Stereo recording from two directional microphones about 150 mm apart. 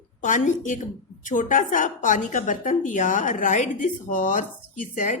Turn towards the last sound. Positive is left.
turn(degrees=55)  # may be behind; listen again after turning